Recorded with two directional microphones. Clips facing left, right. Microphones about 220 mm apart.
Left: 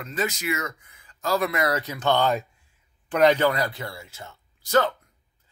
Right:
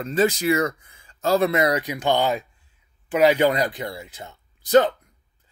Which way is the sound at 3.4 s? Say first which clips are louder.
Right 3 dB; 20° right (ahead or behind).